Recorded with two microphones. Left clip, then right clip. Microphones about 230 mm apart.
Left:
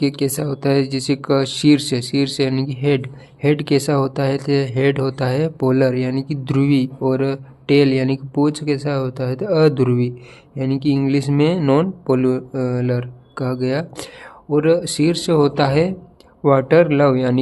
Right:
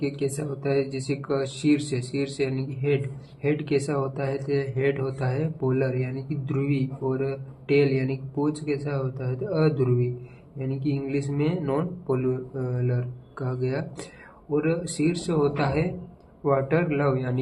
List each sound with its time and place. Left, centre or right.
0.0 s speech: left